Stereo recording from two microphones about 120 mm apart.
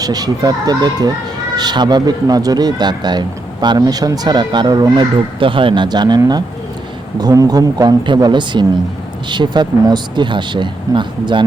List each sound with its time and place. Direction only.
0.0 s speech: 35° right (ahead or behind)
5.4 s speech: 45° right (ahead or behind)